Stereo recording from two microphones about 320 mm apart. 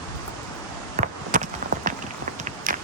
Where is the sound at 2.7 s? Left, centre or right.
Right.